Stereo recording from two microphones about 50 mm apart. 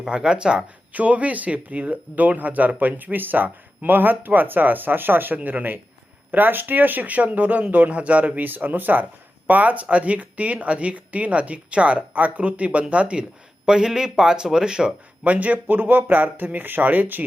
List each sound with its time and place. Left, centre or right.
0.0 s speech: centre
0.9 s speech: right
8.4 s speech: right
13.7 s speech: centre
15.2 s speech: right